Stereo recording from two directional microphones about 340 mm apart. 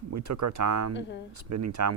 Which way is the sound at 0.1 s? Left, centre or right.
Right.